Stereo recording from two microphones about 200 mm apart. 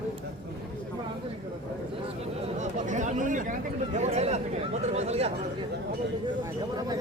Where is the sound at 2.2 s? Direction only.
35° right (ahead or behind).